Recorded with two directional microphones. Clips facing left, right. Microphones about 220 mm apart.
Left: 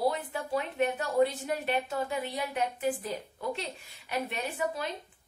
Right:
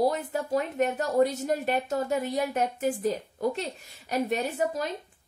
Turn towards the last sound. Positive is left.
turn(degrees=-40)  # may be behind; listen again after turning